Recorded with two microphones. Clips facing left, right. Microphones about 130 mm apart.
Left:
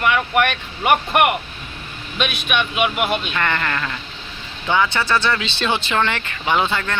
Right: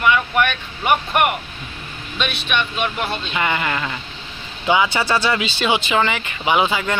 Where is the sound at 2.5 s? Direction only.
10° left (ahead or behind).